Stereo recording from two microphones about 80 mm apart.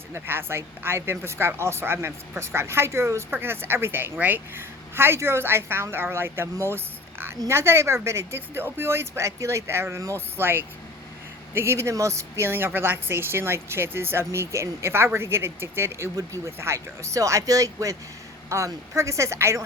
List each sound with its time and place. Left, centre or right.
0.1 s a woman's voice: right